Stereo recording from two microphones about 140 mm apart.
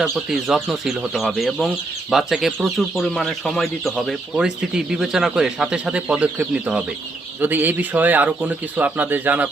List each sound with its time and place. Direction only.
0.0 s speech: centre (ahead or behind)